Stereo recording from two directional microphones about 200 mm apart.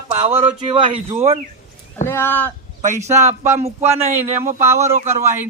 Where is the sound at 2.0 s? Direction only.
10° left (ahead or behind).